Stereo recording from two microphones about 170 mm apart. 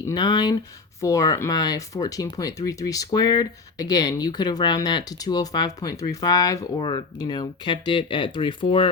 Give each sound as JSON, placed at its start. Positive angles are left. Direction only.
{"t": 0.1, "sound": "speech", "side_deg": 25}